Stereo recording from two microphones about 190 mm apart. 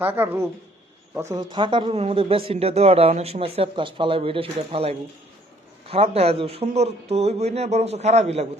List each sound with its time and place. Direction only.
0.0 s speech: 10° right (ahead or behind); by 8.4 s 35° right (ahead or behind)